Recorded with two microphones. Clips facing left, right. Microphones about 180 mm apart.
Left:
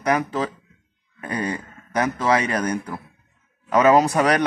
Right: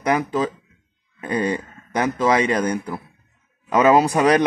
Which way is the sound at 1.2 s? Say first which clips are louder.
Right 4 dB; 25° right (ahead or behind).